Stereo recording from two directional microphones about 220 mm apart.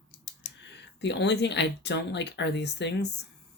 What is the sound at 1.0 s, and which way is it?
Speech, 50° left (ahead or behind).